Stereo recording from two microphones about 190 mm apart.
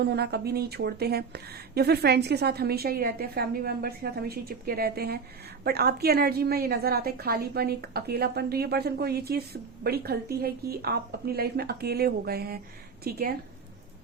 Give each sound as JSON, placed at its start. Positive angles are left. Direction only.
{"t": 0.0, "sound": "a woman's voice", "side_deg": -60}